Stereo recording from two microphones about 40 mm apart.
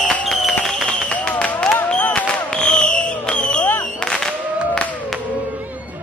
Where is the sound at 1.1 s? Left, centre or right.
Left.